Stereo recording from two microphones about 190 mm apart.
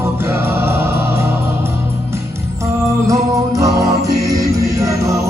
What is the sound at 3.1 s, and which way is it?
Music, 20° right (ahead or behind).